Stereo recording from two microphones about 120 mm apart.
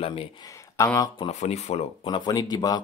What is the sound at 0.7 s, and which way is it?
Speech, 25° left (ahead or behind).